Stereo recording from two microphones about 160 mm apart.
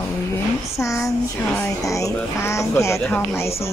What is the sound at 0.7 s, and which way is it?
Speech, 20° left (ahead or behind).